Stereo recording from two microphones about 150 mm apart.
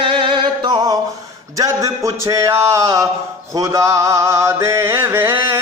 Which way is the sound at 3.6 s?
20° right (ahead or behind).